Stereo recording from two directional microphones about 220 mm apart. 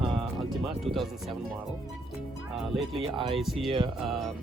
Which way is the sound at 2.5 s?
Centre (ahead or behind).